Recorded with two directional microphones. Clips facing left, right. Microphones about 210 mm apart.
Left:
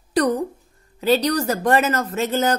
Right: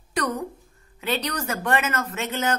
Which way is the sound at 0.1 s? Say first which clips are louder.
Left 8 dB; 35° left (ahead or behind).